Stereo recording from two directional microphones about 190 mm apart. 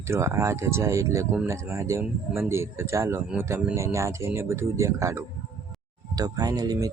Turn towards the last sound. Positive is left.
turn(degrees=-20)  # may be behind; listen again after turning